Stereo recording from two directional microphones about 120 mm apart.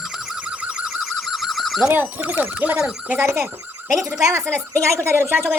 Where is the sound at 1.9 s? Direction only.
15° right (ahead or behind).